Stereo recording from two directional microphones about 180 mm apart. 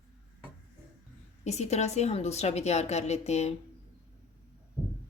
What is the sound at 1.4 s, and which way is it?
A woman's voice, 40° left (ahead or behind).